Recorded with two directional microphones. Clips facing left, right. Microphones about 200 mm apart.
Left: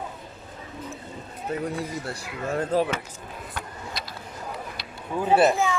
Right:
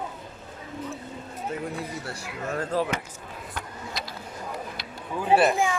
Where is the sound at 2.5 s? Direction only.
25° left (ahead or behind).